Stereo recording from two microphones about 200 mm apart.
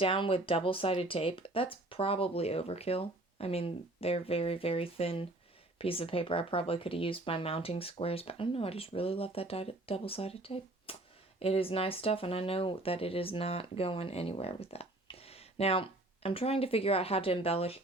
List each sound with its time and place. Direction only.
0.0 s speech: 25° left (ahead or behind)